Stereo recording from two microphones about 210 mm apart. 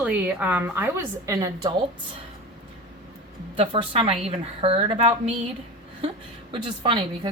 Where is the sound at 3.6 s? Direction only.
30° right (ahead or behind).